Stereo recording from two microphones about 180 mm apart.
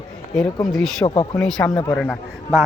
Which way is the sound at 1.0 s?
30° left (ahead or behind).